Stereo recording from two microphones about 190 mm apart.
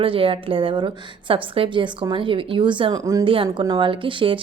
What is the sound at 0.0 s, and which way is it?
A woman's voice, 30° right (ahead or behind).